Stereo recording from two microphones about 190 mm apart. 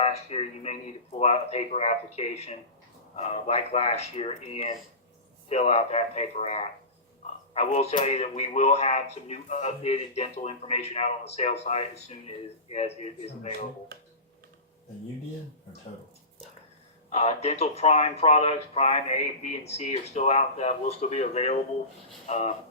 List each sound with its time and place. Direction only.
0.0 s speech: 35° left (ahead or behind)
17.1 s speech: 35° left (ahead or behind)